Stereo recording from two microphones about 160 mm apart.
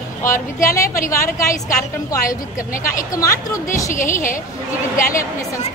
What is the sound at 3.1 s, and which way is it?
Speech, 20° left (ahead or behind).